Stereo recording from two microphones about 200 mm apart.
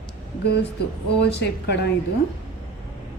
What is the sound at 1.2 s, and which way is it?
Speech, 55° left (ahead or behind).